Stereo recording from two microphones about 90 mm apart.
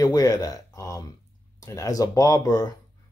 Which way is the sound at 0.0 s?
45° left (ahead or behind).